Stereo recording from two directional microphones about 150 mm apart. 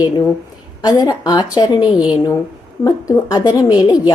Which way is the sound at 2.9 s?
25° left (ahead or behind).